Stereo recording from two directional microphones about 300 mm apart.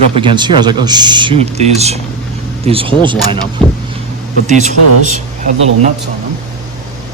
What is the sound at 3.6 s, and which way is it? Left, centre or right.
Speech, centre.